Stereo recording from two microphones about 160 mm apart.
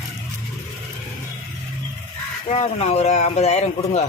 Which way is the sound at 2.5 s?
40° left (ahead or behind).